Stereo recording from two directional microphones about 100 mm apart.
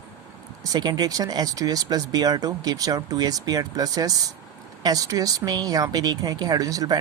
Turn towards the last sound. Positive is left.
turn(degrees=-35)  # may be behind; listen again after turning